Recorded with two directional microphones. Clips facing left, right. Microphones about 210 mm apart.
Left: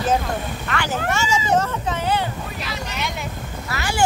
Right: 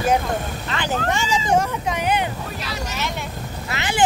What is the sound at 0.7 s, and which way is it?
Speech, 20° right (ahead or behind).